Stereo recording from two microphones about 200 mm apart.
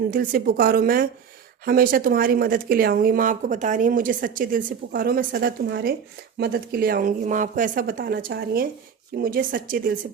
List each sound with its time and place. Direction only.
0.1 s speech: 45° right (ahead or behind)